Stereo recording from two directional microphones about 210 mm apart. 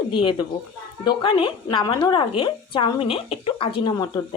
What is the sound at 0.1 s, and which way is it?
Speech, 25° left (ahead or behind).